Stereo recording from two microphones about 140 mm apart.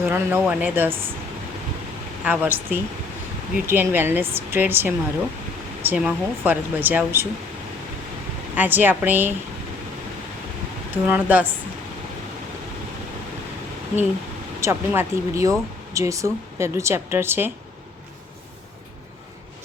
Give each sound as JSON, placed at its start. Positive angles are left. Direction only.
{"t": 0.0, "sound": "speech", "side_deg": -15}
{"t": 2.2, "sound": "speech", "side_deg": -10}
{"t": 8.5, "sound": "speech", "side_deg": -15}
{"t": 10.9, "sound": "speech", "side_deg": -10}
{"t": 14.6, "sound": "speech", "side_deg": -20}